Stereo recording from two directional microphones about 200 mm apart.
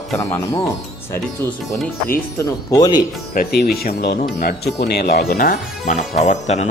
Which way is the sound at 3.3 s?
50° left (ahead or behind).